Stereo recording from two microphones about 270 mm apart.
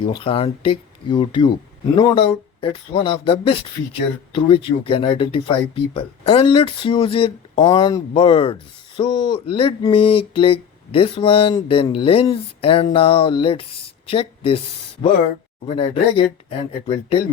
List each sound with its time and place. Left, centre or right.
0.0 s speech: centre
15.6 s speech: left